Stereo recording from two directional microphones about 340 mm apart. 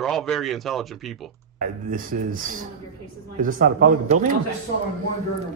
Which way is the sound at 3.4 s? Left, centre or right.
Right.